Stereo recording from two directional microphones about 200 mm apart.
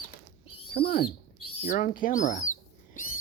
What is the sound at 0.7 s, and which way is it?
Speech, 50° left (ahead or behind).